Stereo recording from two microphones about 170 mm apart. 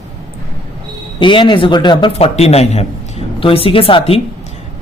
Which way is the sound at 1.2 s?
30° left (ahead or behind).